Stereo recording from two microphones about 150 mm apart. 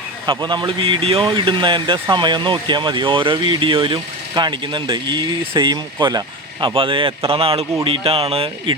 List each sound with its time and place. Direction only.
0.3 s speech: 30° right (ahead or behind)